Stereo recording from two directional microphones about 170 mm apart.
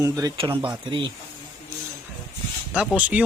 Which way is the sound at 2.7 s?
5° right (ahead or behind).